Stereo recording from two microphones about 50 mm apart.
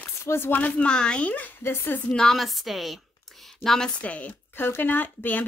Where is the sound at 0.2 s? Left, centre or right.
Left.